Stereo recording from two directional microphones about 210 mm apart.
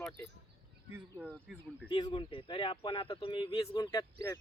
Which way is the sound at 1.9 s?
20° left (ahead or behind).